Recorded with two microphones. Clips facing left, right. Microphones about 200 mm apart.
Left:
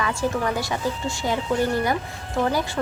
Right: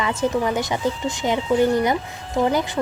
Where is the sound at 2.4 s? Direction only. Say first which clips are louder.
Right 3 dB; 20° right (ahead or behind).